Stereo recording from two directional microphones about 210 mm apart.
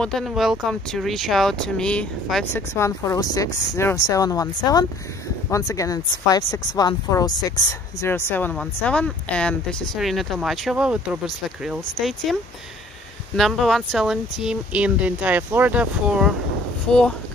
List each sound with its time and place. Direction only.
0.0 s speech: centre (ahead or behind)
2.5 s speech: 15° left (ahead or behind)
13.4 s speech: centre (ahead or behind)